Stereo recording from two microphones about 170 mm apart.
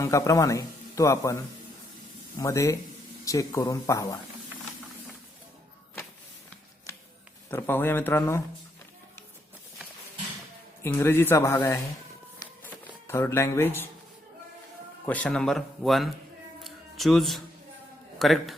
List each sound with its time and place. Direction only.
0.0 s a man's voice: 20° left (ahead or behind)
7.5 s a man's voice: 10° left (ahead or behind)
10.8 s a man's voice: 15° left (ahead or behind)
12.6 s a sound: 15° left (ahead or behind)
15.0 s speech: 10° left (ahead or behind)
16.6 s a sound: centre (ahead or behind)
18.2 s speech: centre (ahead or behind)